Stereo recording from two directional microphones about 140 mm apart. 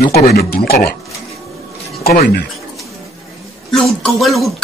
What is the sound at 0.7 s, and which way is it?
Speech, 90° left.